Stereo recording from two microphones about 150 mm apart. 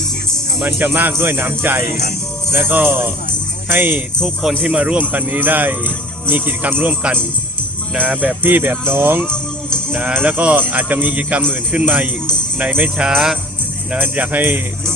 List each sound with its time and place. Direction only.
0.8 s speech: 10° right (ahead or behind)
1.8 s speech: 85° left
2.5 s speech: 15° right (ahead or behind)
4.2 s speech: 5° left (ahead or behind)
4.6 s speech: 10° right (ahead or behind)
9.2 s music: 5° left (ahead or behind)
9.9 s speech: 10° right (ahead or behind)